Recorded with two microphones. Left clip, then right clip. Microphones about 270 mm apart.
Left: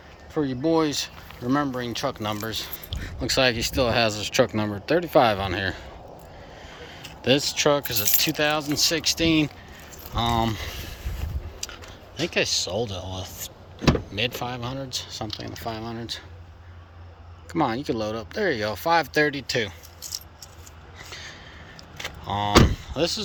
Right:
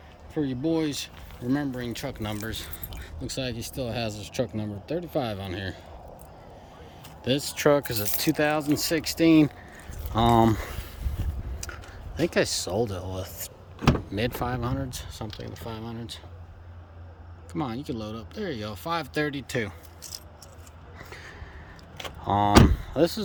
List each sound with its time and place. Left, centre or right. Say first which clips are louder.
0.3 s speech: left 5 dB; centre
11.6 s a sound: left 3 dB; centre
12.2 s speech: left 1 dB; centre
17.5 s speech: left 8 dB; centre
21.0 s a sound: left 4 dB; centre
22.2 s speech: even; right